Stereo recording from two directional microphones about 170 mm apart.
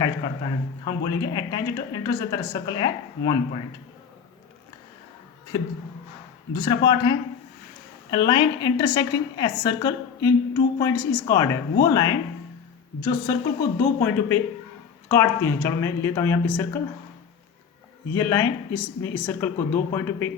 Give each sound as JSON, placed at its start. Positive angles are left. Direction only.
{"t": 0.9, "sound": "speech", "side_deg": 25}
{"t": 6.5, "sound": "speech", "side_deg": 25}
{"t": 18.1, "sound": "speech", "side_deg": 15}